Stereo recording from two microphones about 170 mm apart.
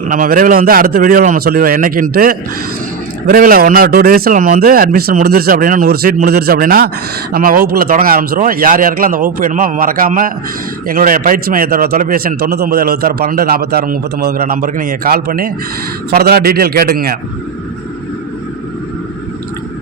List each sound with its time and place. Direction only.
0.1 s a man's voice: 55° right (ahead or behind)